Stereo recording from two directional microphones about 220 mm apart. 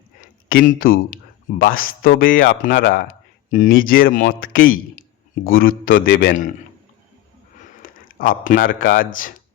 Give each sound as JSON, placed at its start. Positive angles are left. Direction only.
{"t": 0.4, "sound": "speech", "side_deg": 35}
{"t": 7.8, "sound": "speech", "side_deg": 40}